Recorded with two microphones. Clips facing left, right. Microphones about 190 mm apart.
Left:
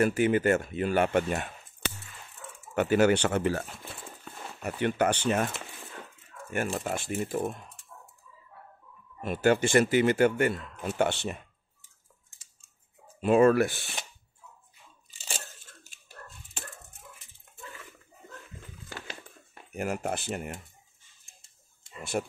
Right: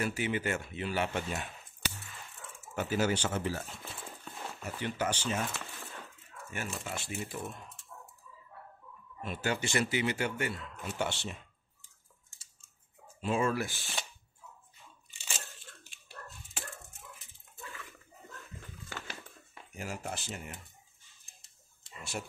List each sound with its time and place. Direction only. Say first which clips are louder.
0.0 s speech: left 9 dB; 50° left (ahead or behind)
1.8 s a sound: left 4 dB; 25° left (ahead or behind)
2.7 s speech: left 8 dB; 65° left (ahead or behind)
6.8 s speech: left 8 dB; 50° left (ahead or behind)
9.2 s speech: left 10 dB; 50° left (ahead or behind)
13.2 s speech: left 10 dB; 60° left (ahead or behind)
15.0 s crunch: left 5 dB; 40° left (ahead or behind)
15.8 s dog: even; 45° left (ahead or behind)
19.5 s speech: left 9 dB; 60° left (ahead or behind)
21.4 s a sound: left 1 dB; 55° left (ahead or behind)